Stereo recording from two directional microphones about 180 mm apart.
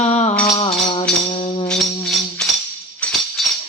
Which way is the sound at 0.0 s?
40° left (ahead or behind).